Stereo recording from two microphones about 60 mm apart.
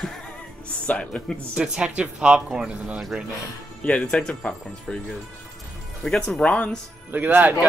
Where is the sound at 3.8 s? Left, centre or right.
Left.